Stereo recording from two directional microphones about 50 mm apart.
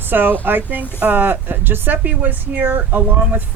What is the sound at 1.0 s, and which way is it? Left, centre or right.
Speech, right.